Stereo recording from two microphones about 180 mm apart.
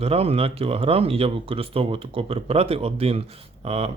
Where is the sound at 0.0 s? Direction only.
35° right (ahead or behind).